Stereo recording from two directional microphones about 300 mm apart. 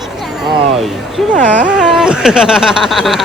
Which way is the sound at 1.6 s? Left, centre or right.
Centre.